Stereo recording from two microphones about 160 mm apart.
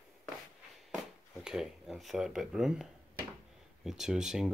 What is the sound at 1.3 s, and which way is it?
Speech, 5° right (ahead or behind).